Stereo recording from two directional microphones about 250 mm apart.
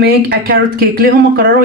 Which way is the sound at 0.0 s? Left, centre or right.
Right.